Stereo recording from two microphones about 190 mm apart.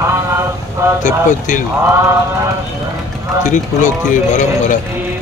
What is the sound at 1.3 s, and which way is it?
Speech, 40° left (ahead or behind).